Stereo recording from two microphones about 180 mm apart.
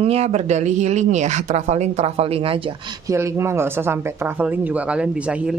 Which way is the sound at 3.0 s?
15° right (ahead or behind).